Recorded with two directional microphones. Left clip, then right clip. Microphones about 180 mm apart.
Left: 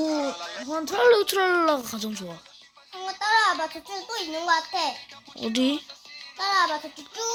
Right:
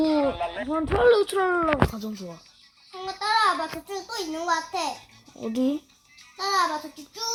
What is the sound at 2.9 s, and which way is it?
A child's voice, 45° left (ahead or behind).